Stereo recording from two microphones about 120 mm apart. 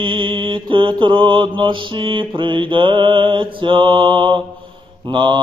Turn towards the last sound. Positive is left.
turn(degrees=-40)  # may be behind; listen again after turning